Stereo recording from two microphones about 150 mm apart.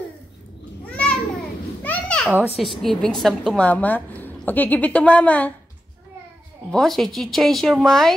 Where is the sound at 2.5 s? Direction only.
Centre (ahead or behind).